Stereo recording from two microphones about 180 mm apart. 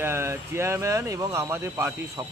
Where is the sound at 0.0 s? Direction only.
15° right (ahead or behind).